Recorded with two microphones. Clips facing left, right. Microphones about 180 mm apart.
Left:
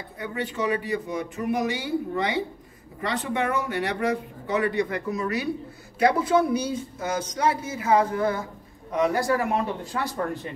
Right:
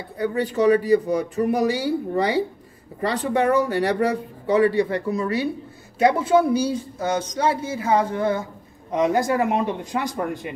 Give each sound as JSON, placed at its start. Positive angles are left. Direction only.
{"t": 0.2, "sound": "speech", "side_deg": -35}